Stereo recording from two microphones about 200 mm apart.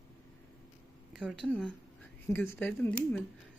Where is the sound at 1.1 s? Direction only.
Centre (ahead or behind).